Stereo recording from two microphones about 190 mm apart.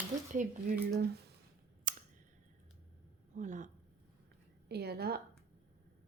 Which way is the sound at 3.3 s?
40° right (ahead or behind).